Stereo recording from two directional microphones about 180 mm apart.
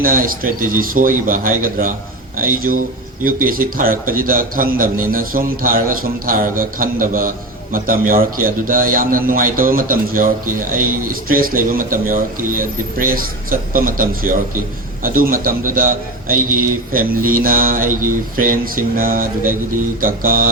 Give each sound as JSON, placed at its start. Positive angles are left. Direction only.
{"t": 0.0, "sound": "a man's voice", "side_deg": -50}